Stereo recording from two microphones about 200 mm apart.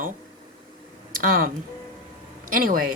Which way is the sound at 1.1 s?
45° right (ahead or behind).